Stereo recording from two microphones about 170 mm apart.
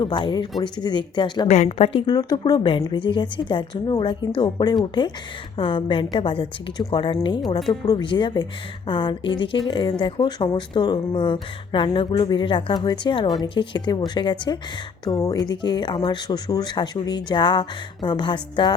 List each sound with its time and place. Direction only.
0.0 s speech: 25° left (ahead or behind)
1.5 s speech: 40° left (ahead or behind)